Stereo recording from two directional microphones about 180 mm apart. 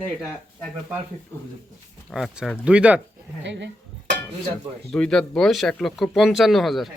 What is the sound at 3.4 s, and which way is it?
Speech, 85° right.